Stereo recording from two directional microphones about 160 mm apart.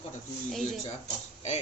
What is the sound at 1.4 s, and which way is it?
Speech, 45° left (ahead or behind).